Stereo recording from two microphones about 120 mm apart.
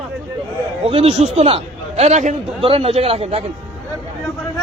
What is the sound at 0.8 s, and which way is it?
A man's voice, 55° right (ahead or behind).